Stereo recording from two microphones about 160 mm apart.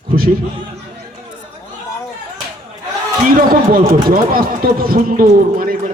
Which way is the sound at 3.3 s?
60° right (ahead or behind).